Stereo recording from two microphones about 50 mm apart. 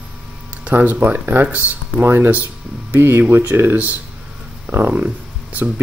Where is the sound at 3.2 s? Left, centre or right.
Right.